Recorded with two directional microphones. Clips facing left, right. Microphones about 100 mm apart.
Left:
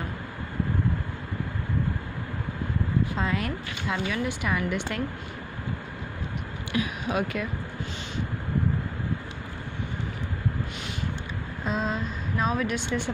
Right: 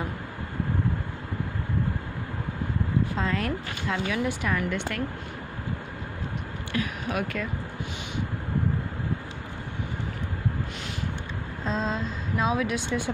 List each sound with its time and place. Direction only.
3.2 s speech: 5° left (ahead or behind)
4.6 s speech: 20° left (ahead or behind)
6.7 s a sound: 15° left (ahead or behind)
11.6 s speech: 10° left (ahead or behind)